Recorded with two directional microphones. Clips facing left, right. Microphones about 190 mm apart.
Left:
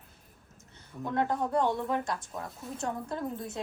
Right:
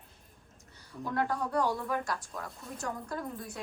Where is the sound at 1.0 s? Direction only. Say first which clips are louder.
Left 3 dB; 20° left (ahead or behind).